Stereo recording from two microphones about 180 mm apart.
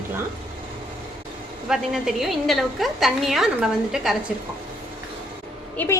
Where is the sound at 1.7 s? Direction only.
Centre (ahead or behind).